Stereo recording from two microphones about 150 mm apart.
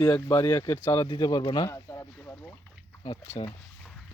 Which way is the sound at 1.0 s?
30° left (ahead or behind).